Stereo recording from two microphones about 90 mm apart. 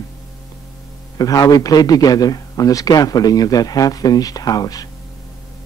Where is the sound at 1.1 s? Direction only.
45° left (ahead or behind).